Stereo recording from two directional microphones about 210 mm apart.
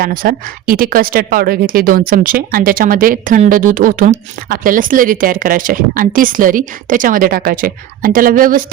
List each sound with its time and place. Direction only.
0.0 s a woman's voice: 45° right (ahead or behind)